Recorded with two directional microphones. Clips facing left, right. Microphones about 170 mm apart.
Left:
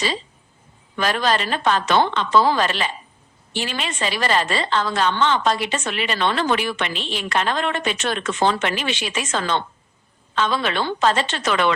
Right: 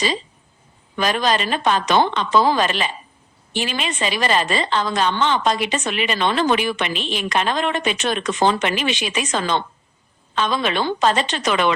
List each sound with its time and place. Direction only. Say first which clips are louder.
0.9 s a woman's voice: right 1 dB; 15° right (ahead or behind)